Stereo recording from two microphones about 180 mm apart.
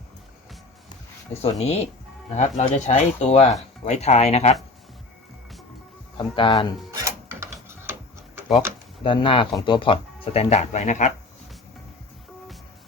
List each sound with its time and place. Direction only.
1.3 s speech: 35° left (ahead or behind)
6.1 s speech: 25° left (ahead or behind)
6.9 s rub: 15° right (ahead or behind)
9.0 s speech: 30° left (ahead or behind)